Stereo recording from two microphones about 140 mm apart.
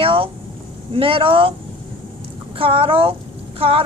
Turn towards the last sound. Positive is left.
turn(degrees=-40)  # may be behind; listen again after turning